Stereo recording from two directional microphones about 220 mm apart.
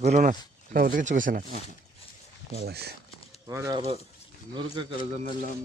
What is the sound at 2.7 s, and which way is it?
Speech, 45° right (ahead or behind).